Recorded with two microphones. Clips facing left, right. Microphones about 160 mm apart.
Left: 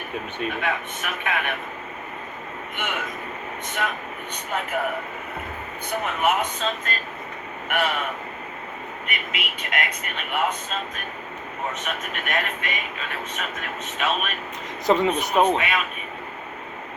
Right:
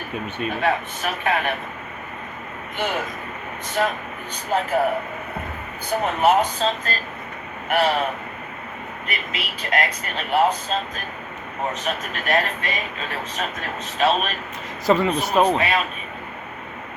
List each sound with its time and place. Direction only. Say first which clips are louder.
0.5 s speech: right 5 dB; 35° right (ahead or behind)
2.7 s speech: right 5 dB; 35° right (ahead or behind)
5.9 s speech: right 5 dB; 35° right (ahead or behind)
14.8 s speech: right 1 dB; 20° left (ahead or behind)
15.4 s speech: right 2 dB; 35° right (ahead or behind)